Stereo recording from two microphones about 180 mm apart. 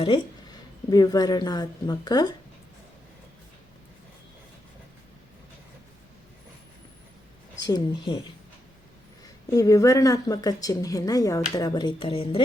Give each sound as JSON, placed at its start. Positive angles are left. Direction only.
{"t": 0.9, "sound": "speech", "side_deg": 20}
{"t": 7.7, "sound": "speech", "side_deg": 25}
{"t": 9.5, "sound": "speech", "side_deg": 20}